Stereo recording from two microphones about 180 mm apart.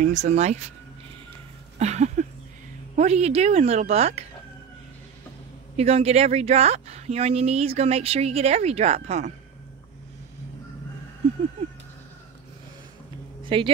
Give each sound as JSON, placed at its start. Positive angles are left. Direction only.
{"t": 0.0, "sound": "speech", "side_deg": -40}
{"t": 1.8, "sound": "speech", "side_deg": -40}
{"t": 5.8, "sound": "speech", "side_deg": -35}
{"t": 13.4, "sound": "a sound", "side_deg": -30}